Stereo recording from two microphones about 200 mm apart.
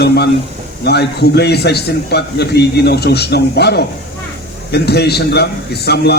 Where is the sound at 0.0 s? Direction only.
55° left (ahead or behind).